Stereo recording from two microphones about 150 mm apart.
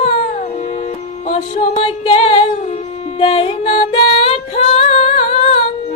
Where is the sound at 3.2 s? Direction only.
40° left (ahead or behind).